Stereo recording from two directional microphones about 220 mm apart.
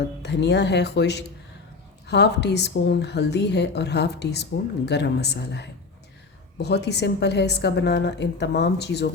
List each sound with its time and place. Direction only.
0.2 s a woman's voice: 50° left (ahead or behind)